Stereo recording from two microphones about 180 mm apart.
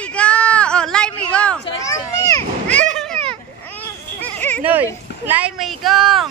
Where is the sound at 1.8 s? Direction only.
20° left (ahead or behind).